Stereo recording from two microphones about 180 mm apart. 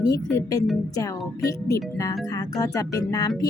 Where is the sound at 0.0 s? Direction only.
20° left (ahead or behind).